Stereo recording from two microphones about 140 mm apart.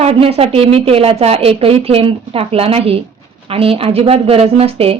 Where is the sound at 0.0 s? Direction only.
45° right (ahead or behind).